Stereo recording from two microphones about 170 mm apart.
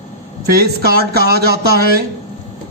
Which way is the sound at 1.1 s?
65° right (ahead or behind).